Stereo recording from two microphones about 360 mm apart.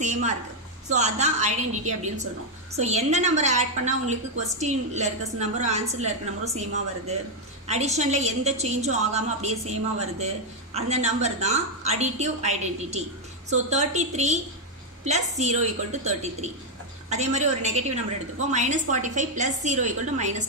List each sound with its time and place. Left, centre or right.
0.0 s a sound: centre
0.8 s a woman's voice: centre
7.6 s a woman's voice: centre